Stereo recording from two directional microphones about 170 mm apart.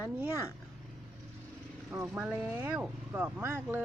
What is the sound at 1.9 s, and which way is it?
Speech, 10° right (ahead or behind).